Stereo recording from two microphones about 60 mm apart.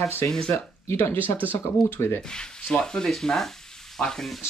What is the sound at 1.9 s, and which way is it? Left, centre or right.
Speech, left.